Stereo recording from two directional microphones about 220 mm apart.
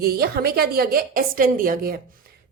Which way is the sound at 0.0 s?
45° right (ahead or behind).